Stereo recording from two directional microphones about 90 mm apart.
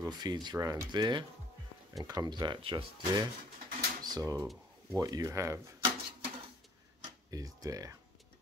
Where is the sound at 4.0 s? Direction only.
45° right (ahead or behind).